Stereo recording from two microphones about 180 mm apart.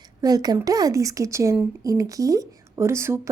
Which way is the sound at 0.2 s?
20° right (ahead or behind).